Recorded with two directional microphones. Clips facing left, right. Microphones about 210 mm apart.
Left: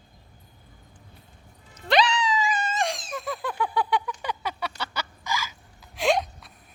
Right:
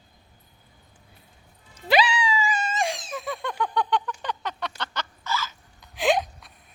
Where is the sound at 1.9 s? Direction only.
5° right (ahead or behind).